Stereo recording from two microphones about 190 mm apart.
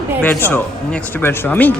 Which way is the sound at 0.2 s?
10° left (ahead or behind).